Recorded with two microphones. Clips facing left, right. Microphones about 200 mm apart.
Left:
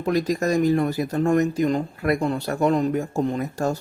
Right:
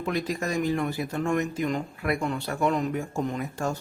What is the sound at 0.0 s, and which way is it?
Speech, 40° left (ahead or behind).